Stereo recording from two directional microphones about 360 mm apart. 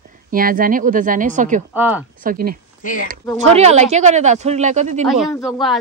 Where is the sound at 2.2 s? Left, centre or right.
Right.